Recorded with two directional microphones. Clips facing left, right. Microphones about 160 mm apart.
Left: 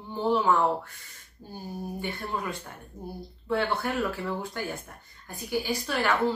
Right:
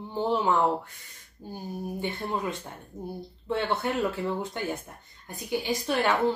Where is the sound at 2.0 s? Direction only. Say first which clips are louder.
Right 3 dB; 20° right (ahead or behind).